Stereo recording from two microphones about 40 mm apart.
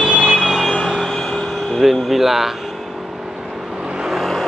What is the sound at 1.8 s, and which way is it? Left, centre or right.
Speech, centre.